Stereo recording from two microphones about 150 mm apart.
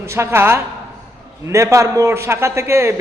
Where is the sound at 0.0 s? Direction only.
15° right (ahead or behind).